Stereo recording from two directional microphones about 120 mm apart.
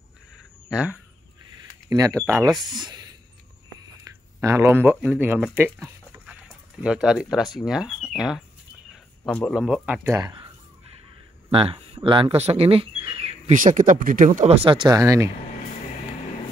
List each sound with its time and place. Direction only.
0.7 s speech: 10° right (ahead or behind)
1.9 s speech: 30° right (ahead or behind)
2.5 s speech: centre (ahead or behind)
2.8 s a sound: 35° right (ahead or behind); by 4.9 s 20° right (ahead or behind)
5.0 s speech: 15° right (ahead or behind)
6.8 s speech: 5° right (ahead or behind)
9.5 s speech: 5° right (ahead or behind)
10.0 s speech: 25° right (ahead or behind)
11.5 s speech: 50° right (ahead or behind)
13.5 s speech: 90° right
14.6 s speech: 45° right (ahead or behind)
15.0 s speech: 25° right (ahead or behind)